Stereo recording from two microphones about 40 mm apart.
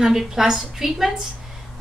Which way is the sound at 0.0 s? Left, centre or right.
Centre.